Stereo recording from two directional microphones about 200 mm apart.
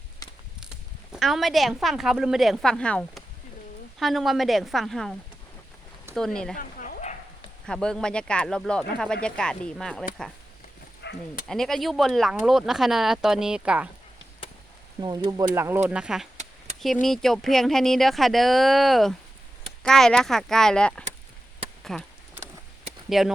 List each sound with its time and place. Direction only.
1.1 s speech: centre (ahead or behind)
6.1 s speech: 5° left (ahead or behind)
6.6 s a sound: 45° left (ahead or behind)
7.7 s speech: 5° left (ahead or behind)
11.0 s speech: 55° left (ahead or behind)
11.4 s speech: centre (ahead or behind)
15.0 s speech: 20° right (ahead or behind); by 22.0 s centre (ahead or behind)
23.0 s speech: centre (ahead or behind)